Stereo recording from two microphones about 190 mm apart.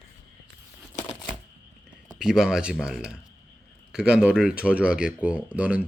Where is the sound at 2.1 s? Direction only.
5° right (ahead or behind).